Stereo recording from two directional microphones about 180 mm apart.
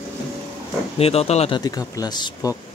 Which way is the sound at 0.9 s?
35° left (ahead or behind).